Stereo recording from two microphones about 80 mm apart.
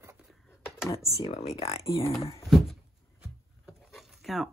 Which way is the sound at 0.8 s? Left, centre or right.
Left.